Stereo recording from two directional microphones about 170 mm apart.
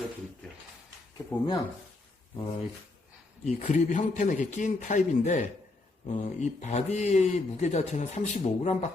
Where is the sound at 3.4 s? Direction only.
45° left (ahead or behind).